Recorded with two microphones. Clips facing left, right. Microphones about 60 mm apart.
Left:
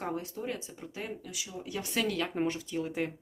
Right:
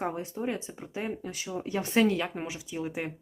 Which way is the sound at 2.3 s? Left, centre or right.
Centre.